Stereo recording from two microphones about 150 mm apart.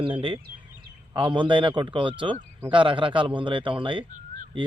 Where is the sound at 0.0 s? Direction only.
35° right (ahead or behind).